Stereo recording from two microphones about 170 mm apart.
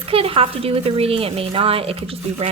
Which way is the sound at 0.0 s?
35° right (ahead or behind).